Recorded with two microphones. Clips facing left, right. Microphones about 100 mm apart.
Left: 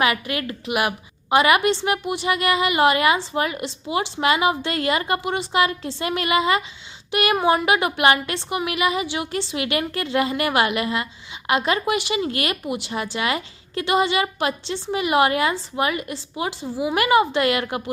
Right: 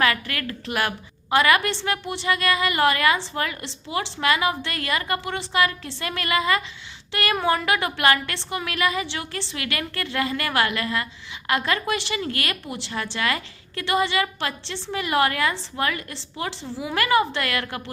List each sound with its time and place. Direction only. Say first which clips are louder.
0.0 s a woman's voice: left 2 dB; 20° left (ahead or behind)